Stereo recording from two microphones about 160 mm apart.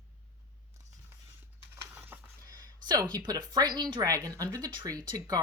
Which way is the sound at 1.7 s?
10° right (ahead or behind).